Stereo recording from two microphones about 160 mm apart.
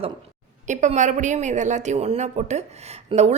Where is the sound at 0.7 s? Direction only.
50° right (ahead or behind).